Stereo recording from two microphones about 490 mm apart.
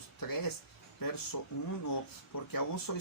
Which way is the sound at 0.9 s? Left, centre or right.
Left.